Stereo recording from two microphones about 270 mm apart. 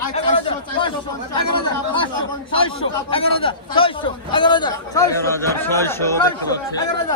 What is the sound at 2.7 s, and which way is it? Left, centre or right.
A man's voice, centre.